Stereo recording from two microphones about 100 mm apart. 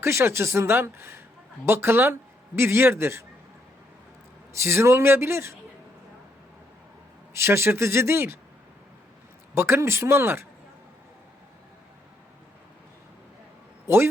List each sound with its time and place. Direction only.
0.0 s a woman's voice: 25° right (ahead or behind)
4.5 s a woman's voice: 25° right (ahead or behind)
7.3 s a woman's voice: 25° right (ahead or behind)
9.6 s a woman's voice: 25° right (ahead or behind)
13.8 s a man's voice: 25° right (ahead or behind)